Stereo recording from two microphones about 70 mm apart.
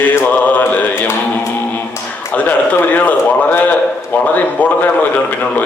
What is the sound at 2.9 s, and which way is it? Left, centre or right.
Mantra, left.